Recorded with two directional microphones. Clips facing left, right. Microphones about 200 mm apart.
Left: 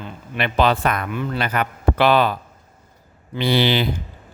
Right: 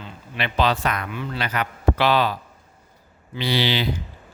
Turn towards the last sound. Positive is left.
turn(degrees=55)  # may be behind; listen again after turning